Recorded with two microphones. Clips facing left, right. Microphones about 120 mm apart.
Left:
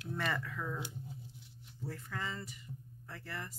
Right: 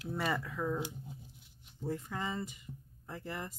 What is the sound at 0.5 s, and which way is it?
Speech, 25° right (ahead or behind).